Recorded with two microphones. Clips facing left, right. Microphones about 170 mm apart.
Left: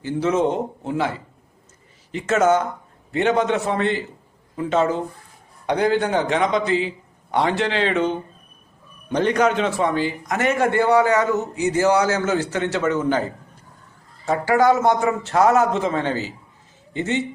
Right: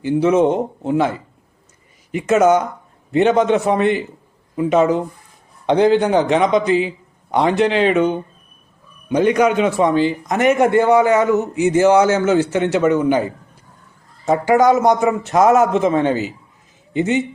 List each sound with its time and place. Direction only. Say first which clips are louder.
0.0 s a man's voice: right 6 dB; 15° right (ahead or behind)
2.1 s a man's voice: right 4 dB; 15° right (ahead or behind)